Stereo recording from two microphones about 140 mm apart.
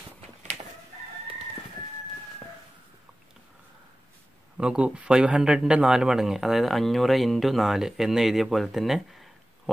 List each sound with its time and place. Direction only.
0.4 s chicken: 55° right (ahead or behind)
4.6 s speech: 5° right (ahead or behind)